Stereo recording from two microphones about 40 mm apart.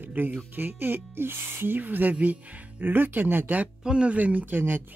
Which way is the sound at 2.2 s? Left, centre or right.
Right.